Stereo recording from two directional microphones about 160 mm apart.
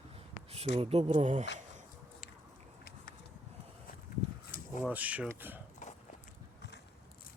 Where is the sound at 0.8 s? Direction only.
40° right (ahead or behind).